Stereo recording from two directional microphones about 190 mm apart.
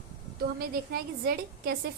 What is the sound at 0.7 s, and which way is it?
A woman's voice, 55° right (ahead or behind).